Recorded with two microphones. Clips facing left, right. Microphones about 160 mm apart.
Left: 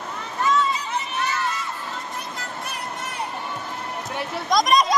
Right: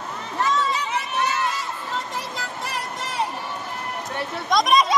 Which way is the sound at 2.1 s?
90° right.